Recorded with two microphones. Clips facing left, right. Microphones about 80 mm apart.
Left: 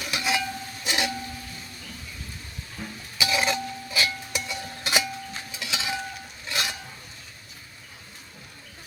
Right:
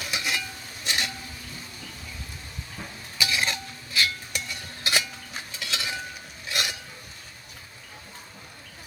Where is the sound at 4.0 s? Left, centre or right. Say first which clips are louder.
Even; centre.